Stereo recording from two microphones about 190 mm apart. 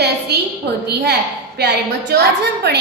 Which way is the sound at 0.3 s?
55° right (ahead or behind).